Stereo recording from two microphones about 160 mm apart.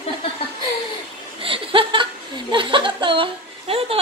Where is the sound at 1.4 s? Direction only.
35° right (ahead or behind).